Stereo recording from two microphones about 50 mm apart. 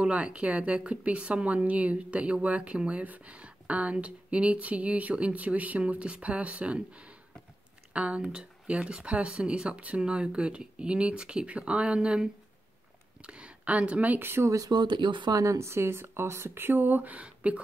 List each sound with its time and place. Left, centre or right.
0.0 s speech: right
14.2 s speech: right
15.4 s speech: right